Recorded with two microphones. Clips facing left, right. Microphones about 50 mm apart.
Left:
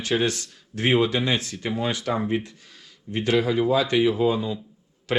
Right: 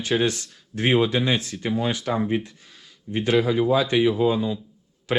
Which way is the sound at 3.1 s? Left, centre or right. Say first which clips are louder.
Right 1 dB; centre.